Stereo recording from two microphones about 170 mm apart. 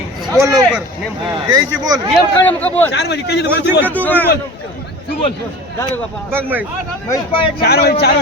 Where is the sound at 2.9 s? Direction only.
80° left.